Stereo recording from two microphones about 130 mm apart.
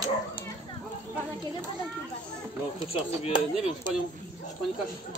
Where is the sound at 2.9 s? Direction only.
40° left (ahead or behind).